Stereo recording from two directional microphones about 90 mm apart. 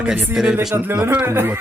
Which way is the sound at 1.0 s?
20° right (ahead or behind).